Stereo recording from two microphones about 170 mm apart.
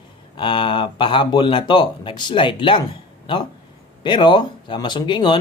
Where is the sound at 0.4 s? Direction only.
30° left (ahead or behind).